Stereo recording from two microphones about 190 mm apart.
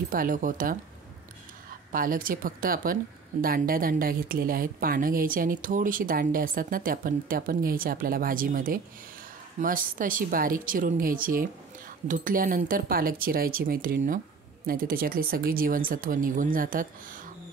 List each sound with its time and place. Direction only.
0.1 s speech: 45° right (ahead or behind)
1.9 s speech: 50° right (ahead or behind)